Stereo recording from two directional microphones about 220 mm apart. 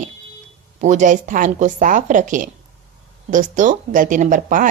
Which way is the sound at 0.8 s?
35° right (ahead or behind).